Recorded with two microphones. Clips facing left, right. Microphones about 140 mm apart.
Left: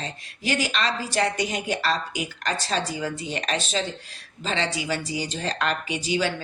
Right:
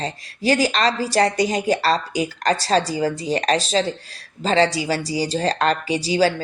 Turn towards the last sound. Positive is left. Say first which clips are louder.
# right 7 dB
turn(degrees=-35)  # may be behind; listen again after turning